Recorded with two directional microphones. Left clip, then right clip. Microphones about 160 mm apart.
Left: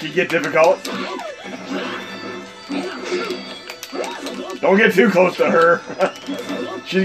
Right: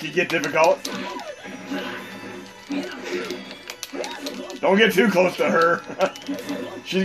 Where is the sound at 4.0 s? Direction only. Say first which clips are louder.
Left 5 dB; 50° left (ahead or behind).